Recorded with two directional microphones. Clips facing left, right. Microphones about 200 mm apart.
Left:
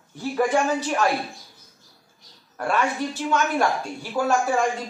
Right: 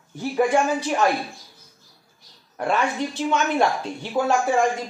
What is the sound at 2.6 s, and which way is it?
A woman's voice, 20° right (ahead or behind).